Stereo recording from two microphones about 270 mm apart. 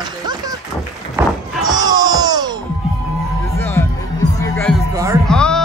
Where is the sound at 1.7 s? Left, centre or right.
Centre.